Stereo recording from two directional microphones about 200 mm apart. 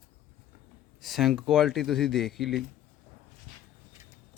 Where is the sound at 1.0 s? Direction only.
Centre (ahead or behind).